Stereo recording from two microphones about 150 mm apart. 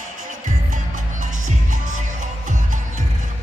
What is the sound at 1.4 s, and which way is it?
Music, 60° right (ahead or behind).